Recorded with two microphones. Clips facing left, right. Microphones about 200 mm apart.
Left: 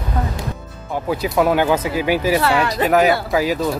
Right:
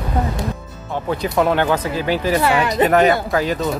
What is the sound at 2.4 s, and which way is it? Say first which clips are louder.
Speech: right 1 dB; 15° right (ahead or behind).